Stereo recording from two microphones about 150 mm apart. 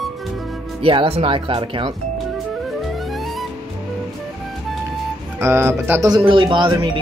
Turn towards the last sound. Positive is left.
turn(degrees=-30)  # may be behind; listen again after turning